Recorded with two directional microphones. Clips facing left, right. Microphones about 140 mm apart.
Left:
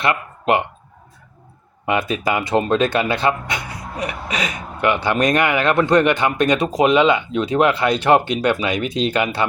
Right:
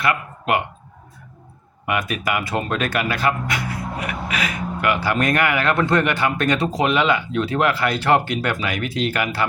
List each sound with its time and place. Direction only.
0.0 s speech: 25° left (ahead or behind)
1.9 s speech: 25° left (ahead or behind)